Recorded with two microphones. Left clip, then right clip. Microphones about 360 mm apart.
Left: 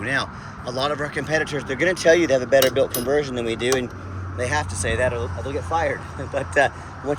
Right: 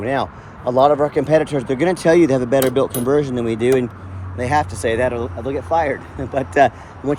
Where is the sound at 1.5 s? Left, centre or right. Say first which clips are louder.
Right 6 dB; right.